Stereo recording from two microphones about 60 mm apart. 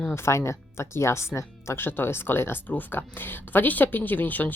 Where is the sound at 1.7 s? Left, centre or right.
Left.